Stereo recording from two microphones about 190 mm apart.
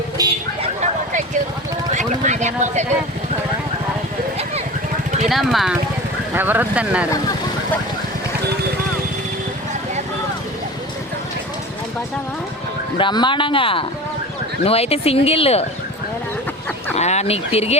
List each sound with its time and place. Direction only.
0.2 s vehicle: 20° right (ahead or behind)
2.0 s speech: 40° right (ahead or behind)
5.3 s speech: centre (ahead or behind)
13.0 s speech: 25° left (ahead or behind)
17.0 s speech: 35° left (ahead or behind)